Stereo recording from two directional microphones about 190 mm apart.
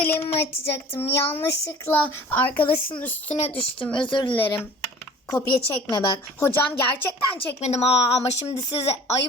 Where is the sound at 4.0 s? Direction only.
25° left (ahead or behind).